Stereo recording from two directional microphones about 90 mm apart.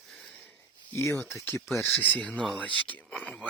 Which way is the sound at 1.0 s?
30° left (ahead or behind).